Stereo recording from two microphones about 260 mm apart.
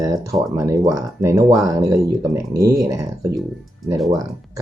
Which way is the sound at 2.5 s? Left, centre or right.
Right.